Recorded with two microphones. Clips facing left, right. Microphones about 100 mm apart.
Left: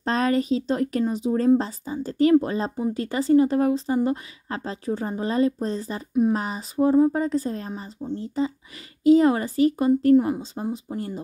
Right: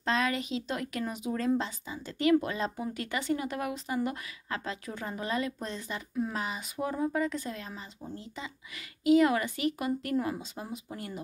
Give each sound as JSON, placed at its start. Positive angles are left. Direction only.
{"t": 0.0, "sound": "speech", "side_deg": 40}